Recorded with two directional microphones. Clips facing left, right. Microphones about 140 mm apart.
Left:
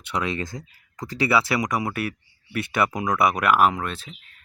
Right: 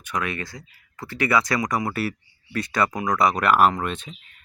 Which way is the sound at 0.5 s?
30° left (ahead or behind).